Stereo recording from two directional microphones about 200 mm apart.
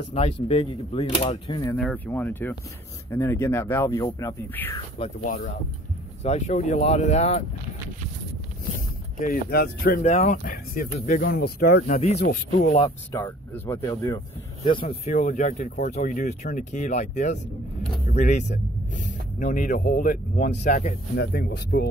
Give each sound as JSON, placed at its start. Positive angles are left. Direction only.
{"t": 0.1, "sound": "speech", "side_deg": 30}
{"t": 1.8, "sound": "speech", "side_deg": 5}
{"t": 4.9, "sound": "speech", "side_deg": 30}
{"t": 9.2, "sound": "speech", "side_deg": 50}
{"t": 10.0, "sound": "speech", "side_deg": 35}
{"t": 11.3, "sound": "speech", "side_deg": 55}
{"t": 12.0, "sound": "speech", "side_deg": 35}
{"t": 13.1, "sound": "speech", "side_deg": 10}
{"t": 14.9, "sound": "speech", "side_deg": 35}
{"t": 21.2, "sound": "speech", "side_deg": 50}